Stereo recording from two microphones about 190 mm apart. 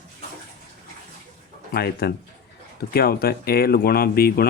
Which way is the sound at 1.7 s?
55° left (ahead or behind).